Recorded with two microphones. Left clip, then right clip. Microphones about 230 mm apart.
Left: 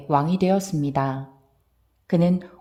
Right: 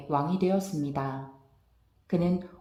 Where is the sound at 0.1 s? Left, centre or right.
Left.